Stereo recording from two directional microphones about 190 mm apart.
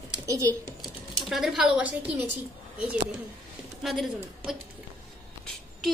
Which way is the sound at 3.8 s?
Centre (ahead or behind).